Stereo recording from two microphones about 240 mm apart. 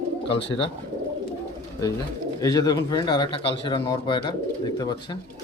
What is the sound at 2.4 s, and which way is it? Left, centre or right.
Speech, centre.